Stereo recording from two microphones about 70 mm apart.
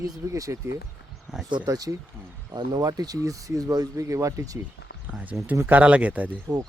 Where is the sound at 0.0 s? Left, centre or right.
Right.